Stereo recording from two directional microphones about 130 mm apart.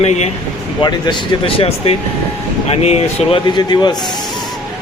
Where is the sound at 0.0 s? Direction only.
60° left (ahead or behind).